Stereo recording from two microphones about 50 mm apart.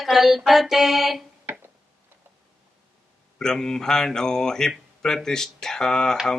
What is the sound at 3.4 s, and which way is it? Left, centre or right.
Speech, centre.